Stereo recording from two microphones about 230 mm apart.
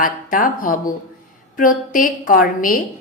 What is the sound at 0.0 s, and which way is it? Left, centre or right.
A woman's voice, left.